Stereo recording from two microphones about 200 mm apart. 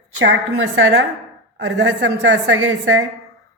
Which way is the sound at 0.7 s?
75° right (ahead or behind).